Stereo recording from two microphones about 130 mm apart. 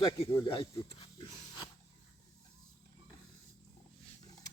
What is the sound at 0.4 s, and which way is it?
Speech, 40° left (ahead or behind).